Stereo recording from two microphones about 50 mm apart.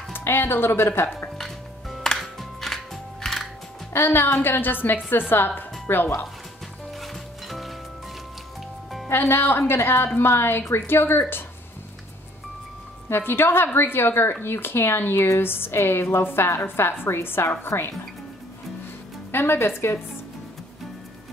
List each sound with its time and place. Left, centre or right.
0.2 s speech: left
1.4 s music: centre
3.9 s a woman's voice: left
6.9 s music: centre
9.1 s speech: left
13.1 s speech: left
19.3 s speech: left